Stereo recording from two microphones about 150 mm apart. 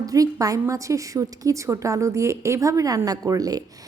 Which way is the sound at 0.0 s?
25° right (ahead or behind).